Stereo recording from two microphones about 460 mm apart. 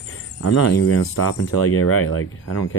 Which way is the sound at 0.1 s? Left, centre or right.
Left.